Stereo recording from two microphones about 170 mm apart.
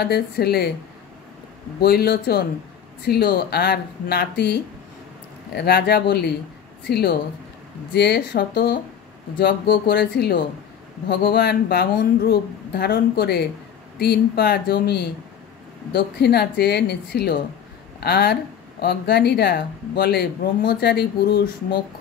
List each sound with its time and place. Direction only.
0.0 s speech: 70° left (ahead or behind)
1.8 s speech: 65° left (ahead or behind)
5.5 s speech: 70° left (ahead or behind)